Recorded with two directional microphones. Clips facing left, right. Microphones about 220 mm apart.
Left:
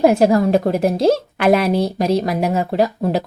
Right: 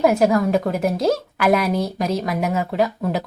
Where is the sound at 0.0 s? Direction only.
30° left (ahead or behind).